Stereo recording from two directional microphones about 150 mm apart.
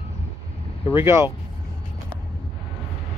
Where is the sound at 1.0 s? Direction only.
15° right (ahead or behind).